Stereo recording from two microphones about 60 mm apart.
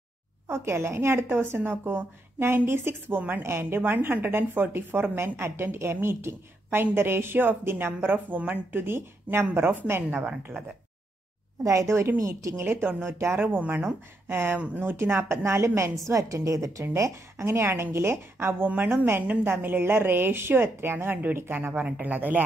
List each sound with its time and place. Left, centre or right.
0.5 s a woman's voice: right
8.7 s speech: right
9.6 s a woman's voice: right
11.6 s a woman's voice: right
13.4 s a woman's voice: right
16.9 s a woman's voice: right